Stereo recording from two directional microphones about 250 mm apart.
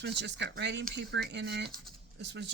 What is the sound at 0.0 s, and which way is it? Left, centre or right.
Speech, right.